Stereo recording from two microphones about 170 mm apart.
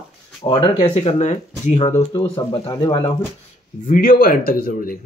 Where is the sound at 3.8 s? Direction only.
55° left (ahead or behind).